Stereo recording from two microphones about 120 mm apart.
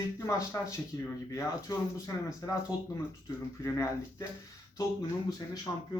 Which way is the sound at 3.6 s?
25° left (ahead or behind).